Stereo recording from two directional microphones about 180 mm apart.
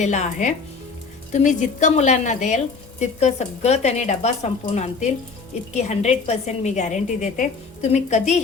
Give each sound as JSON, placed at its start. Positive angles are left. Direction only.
{"t": 0.0, "sound": "a woman's voice", "side_deg": 40}